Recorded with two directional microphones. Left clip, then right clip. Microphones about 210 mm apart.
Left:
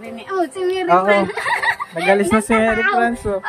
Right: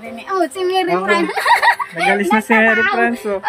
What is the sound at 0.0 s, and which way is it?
A woman's voice, 30° right (ahead or behind).